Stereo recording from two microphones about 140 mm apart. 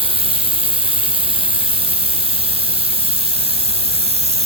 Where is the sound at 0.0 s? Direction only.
40° right (ahead or behind).